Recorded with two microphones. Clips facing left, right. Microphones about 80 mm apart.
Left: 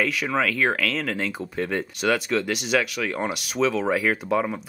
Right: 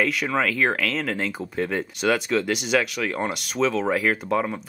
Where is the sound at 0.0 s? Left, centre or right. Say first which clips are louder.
Right 1 dB; centre.